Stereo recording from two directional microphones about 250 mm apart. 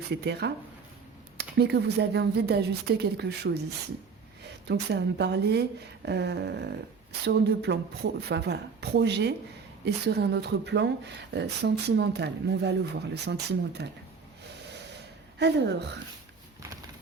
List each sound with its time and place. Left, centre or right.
0.1 s speech: right
4.7 s speech: right
15.4 s speech: right